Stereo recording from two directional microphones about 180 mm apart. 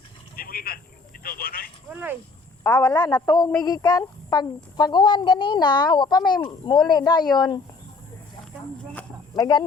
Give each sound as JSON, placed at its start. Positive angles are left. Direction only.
{"t": 0.3, "sound": "a sound", "side_deg": 55}
{"t": 1.2, "sound": "speech", "side_deg": 55}
{"t": 1.9, "sound": "speech", "side_deg": -10}
{"t": 2.6, "sound": "speech", "side_deg": 15}
{"t": 9.3, "sound": "speech", "side_deg": 20}